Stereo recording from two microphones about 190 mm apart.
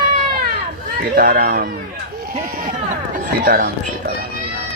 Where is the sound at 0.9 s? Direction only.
50° right (ahead or behind).